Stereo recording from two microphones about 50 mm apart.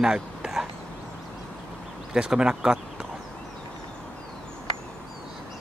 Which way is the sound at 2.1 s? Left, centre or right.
Centre.